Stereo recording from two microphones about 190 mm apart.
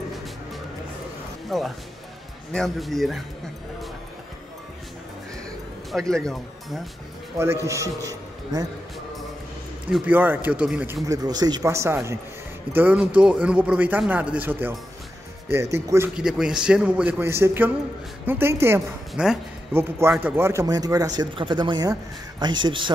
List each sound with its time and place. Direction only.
1.5 s a man's voice: centre (ahead or behind)
5.9 s speech: 5° left (ahead or behind)
7.6 s speech: 15° right (ahead or behind)
9.8 s speech: 5° right (ahead or behind)
16.2 s a man's voice: 5° right (ahead or behind); by 22.8 s 25° right (ahead or behind)